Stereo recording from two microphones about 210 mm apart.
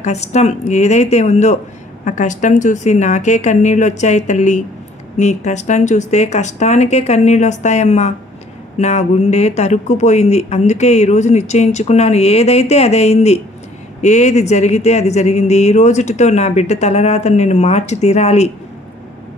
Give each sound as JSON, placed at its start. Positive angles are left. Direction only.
{"t": 0.0, "sound": "speech", "side_deg": 30}